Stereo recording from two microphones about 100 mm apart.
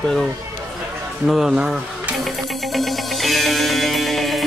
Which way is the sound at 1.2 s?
5° right (ahead or behind).